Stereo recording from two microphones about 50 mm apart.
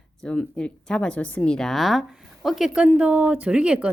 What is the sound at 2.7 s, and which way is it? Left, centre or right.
Speech, centre.